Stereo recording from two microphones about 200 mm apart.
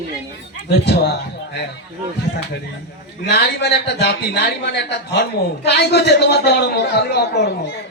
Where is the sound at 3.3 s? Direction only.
55° left (ahead or behind).